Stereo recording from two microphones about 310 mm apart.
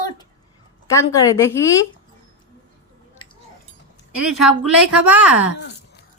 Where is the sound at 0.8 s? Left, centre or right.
Centre.